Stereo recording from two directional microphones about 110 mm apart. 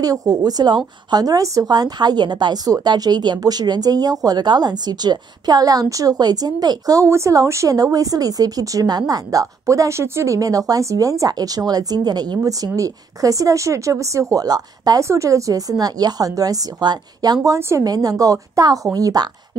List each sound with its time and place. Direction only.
0.0 s a woman's voice: 35° right (ahead or behind)